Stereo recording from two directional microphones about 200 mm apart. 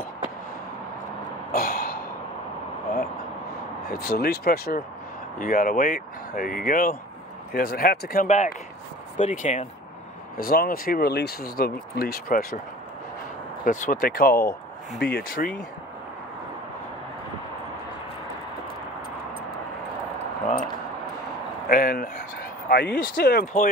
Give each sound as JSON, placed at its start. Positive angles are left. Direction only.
{"t": 1.5, "sound": "a sound", "side_deg": 50}
{"t": 3.9, "sound": "speech", "side_deg": 50}
{"t": 9.2, "sound": "speech", "side_deg": 40}
{"t": 10.3, "sound": "speech", "side_deg": 50}
{"t": 13.7, "sound": "speech", "side_deg": 40}
{"t": 21.6, "sound": "speech", "side_deg": 45}